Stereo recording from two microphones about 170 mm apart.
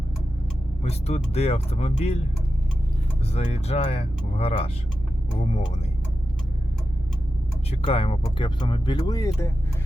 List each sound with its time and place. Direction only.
0.8 s speech: 40° left (ahead or behind)
3.3 s speech: 40° left (ahead or behind)
7.7 s speech: 35° left (ahead or behind); by 9.5 s 20° left (ahead or behind)